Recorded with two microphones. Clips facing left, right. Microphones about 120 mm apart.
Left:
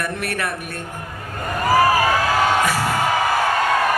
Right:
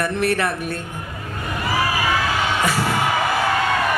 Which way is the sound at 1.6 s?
45° left (ahead or behind).